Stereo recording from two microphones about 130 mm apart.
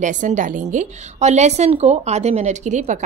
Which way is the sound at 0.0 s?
75° right (ahead or behind).